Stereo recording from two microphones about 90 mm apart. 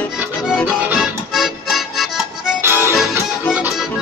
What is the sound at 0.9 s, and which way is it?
Music, centre (ahead or behind).